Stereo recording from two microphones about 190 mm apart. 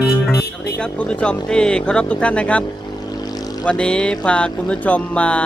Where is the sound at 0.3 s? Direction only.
55° left (ahead or behind).